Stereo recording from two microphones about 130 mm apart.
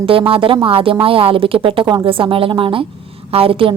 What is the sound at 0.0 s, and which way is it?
A woman's voice, 45° right (ahead or behind).